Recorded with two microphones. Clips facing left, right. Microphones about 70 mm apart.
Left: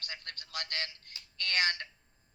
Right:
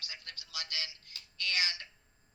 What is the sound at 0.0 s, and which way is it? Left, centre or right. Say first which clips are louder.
A woman's voice: left 4 dB; left.